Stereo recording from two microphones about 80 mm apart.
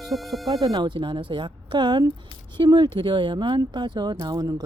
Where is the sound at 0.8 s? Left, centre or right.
Right.